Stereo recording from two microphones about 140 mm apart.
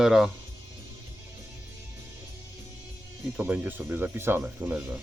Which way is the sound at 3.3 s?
10° right (ahead or behind).